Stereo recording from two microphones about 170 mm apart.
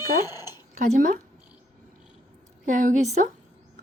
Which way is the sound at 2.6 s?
50° right (ahead or behind).